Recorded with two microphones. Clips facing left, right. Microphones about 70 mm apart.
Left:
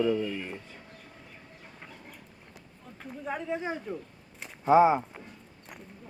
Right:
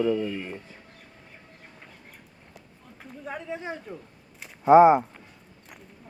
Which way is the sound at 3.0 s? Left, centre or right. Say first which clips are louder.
Left 2 dB; centre.